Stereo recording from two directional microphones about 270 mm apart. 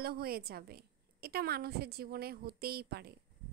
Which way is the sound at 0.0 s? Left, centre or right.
Right.